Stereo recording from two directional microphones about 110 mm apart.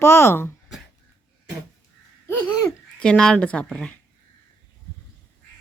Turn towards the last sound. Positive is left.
turn(degrees=10)  # may be behind; listen again after turning